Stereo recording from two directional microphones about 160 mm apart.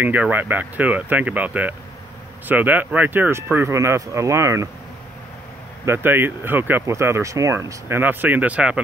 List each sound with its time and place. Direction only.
0.0 s speech: 10° right (ahead or behind)
5.9 s speech: 15° right (ahead or behind)